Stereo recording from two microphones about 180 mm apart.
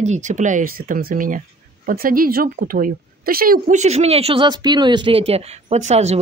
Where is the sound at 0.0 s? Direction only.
40° right (ahead or behind).